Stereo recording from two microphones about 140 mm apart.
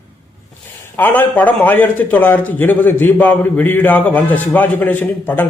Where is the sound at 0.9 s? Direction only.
15° left (ahead or behind).